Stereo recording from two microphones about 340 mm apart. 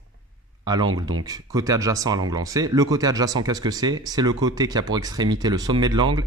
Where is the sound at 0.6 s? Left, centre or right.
Centre.